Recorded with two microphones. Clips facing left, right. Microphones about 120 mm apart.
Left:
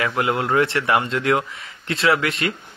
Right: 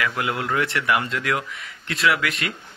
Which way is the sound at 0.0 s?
30° left (ahead or behind).